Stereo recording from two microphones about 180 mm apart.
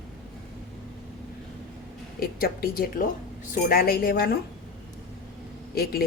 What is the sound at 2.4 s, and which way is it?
A woman's voice, 55° left (ahead or behind).